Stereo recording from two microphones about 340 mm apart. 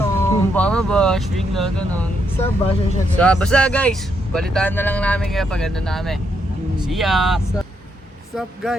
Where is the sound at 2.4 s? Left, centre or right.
Centre.